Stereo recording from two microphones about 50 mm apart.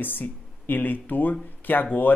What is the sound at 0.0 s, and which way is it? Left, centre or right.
Speech, left.